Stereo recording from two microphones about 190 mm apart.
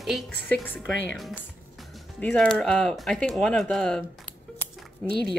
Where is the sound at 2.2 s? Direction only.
5° left (ahead or behind).